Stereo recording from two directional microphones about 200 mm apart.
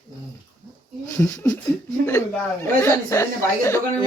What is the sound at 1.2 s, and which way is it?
Speech, 10° left (ahead or behind).